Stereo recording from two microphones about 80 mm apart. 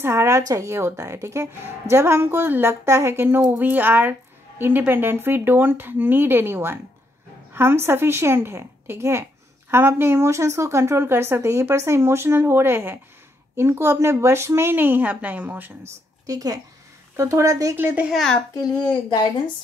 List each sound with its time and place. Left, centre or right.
0.0 s a woman's voice: right
16.3 s speech: right
17.7 s speech: right